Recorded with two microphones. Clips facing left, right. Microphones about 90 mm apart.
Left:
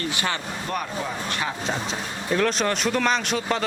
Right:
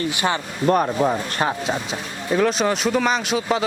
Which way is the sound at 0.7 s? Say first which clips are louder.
Right 11 dB; 45° right (ahead or behind).